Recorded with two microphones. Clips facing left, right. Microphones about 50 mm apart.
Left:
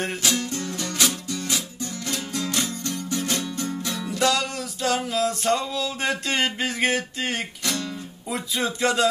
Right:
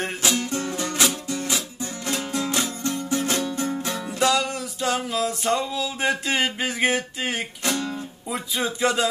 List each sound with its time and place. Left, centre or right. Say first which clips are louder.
0.2 s music: right 2 dB; right
4.2 s music: right 1 dB; centre
7.6 s music: right 4 dB; right
8.3 s speech: even; centre